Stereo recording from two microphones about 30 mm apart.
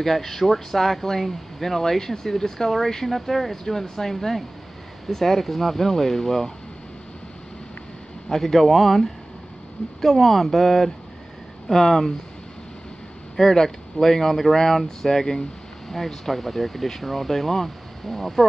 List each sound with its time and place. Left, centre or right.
0.0 s speech: centre
8.3 s speech: centre
11.7 s speech: centre
13.4 s speech: centre
15.9 s speech: centre